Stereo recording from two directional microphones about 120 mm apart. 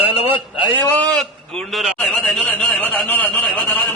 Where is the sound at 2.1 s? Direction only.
10° left (ahead or behind).